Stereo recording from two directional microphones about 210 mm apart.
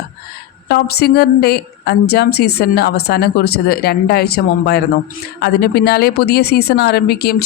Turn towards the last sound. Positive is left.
turn(degrees=50)  # may be behind; listen again after turning